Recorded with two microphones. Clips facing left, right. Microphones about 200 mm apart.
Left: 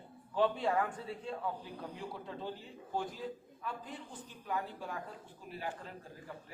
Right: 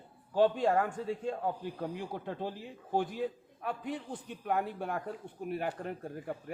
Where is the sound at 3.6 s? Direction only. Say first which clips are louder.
Right 7 dB; 65° right (ahead or behind).